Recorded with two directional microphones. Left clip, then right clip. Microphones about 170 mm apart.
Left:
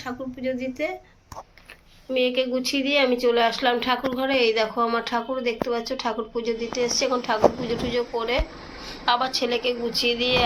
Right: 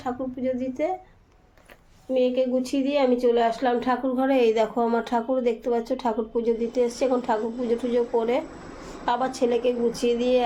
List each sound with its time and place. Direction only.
0.0 s speech: 40° right (ahead or behind)
2.1 s speech: 40° right (ahead or behind)
4.2 s a woman's voice: 70° right (ahead or behind)
9.0 s speech: 50° right (ahead or behind)